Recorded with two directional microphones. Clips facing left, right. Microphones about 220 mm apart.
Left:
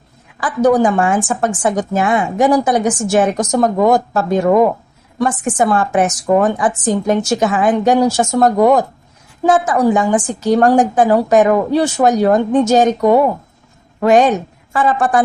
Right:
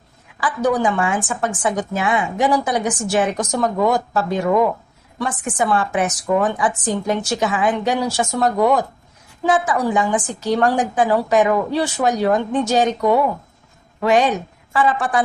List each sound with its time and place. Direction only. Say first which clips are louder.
0.3 s a woman's voice: left 6 dB; 45° left (ahead or behind)